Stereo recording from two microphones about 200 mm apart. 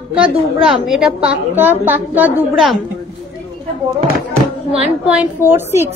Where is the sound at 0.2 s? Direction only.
Centre (ahead or behind).